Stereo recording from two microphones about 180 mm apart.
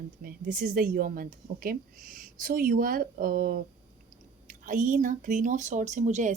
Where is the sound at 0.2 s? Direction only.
50° right (ahead or behind).